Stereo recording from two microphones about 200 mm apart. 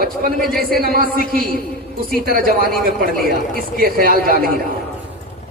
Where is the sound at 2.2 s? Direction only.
45° right (ahead or behind).